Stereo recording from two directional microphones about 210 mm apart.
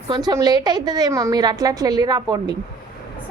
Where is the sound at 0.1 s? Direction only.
20° right (ahead or behind).